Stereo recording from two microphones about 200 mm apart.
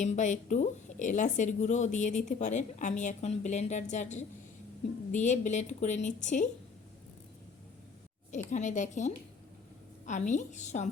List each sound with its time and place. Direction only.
0.0 s a woman's voice: 35° left (ahead or behind)
8.4 s a woman's voice: 35° left (ahead or behind)